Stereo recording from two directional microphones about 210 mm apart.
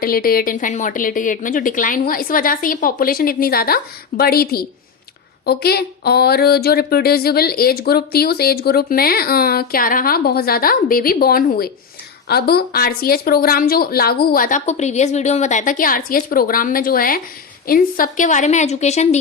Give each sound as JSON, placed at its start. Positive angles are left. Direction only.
{"t": 0.0, "sound": "a woman's voice", "side_deg": 45}